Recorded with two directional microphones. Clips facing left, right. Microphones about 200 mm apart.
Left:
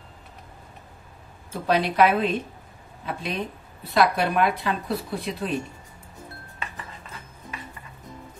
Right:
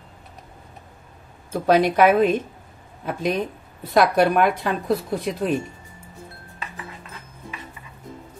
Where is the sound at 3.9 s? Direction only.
45° right (ahead or behind).